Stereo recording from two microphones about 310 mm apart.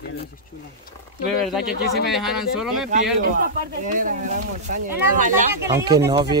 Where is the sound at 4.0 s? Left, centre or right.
Right.